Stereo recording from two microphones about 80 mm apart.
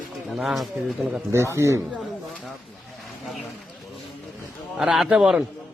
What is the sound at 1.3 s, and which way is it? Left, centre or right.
Speech, right.